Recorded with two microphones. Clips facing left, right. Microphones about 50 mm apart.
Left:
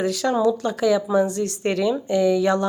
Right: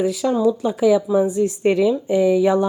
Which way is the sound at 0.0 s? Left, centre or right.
Centre.